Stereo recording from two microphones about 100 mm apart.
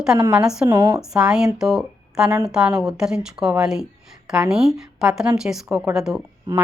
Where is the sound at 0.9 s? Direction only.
5° right (ahead or behind).